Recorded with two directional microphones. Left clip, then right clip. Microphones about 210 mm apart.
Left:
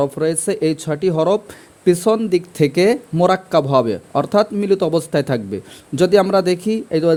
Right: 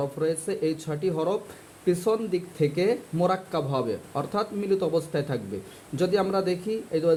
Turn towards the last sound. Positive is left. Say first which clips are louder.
# left 8 dB
turn(degrees=50)  # may be behind; listen again after turning